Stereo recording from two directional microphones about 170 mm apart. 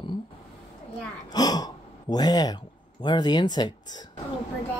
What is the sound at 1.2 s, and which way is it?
Speech, 25° left (ahead or behind).